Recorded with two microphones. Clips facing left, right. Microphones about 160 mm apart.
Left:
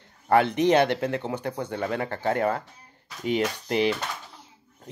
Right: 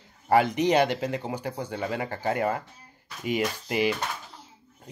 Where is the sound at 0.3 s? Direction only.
10° right (ahead or behind).